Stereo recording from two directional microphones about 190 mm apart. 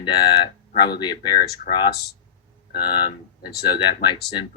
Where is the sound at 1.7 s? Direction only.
45° left (ahead or behind).